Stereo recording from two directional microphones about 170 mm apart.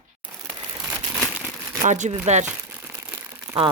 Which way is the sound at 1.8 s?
45° right (ahead or behind).